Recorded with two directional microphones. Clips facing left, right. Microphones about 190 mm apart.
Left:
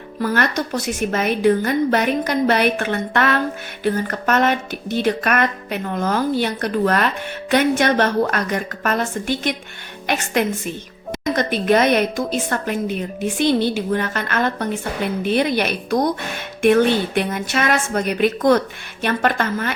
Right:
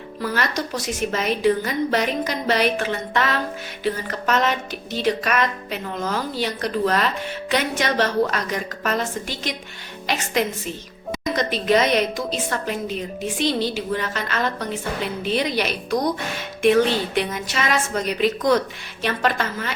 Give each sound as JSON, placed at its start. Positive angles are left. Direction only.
{"t": 0.2, "sound": "a woman's voice", "side_deg": 55}
{"t": 11.3, "sound": "a woman's voice", "side_deg": 55}